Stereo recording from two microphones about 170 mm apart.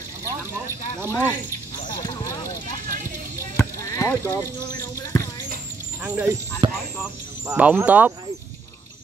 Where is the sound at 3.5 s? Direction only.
15° left (ahead or behind).